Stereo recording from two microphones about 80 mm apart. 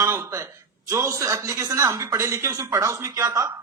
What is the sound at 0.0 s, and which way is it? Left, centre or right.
A man's voice, right.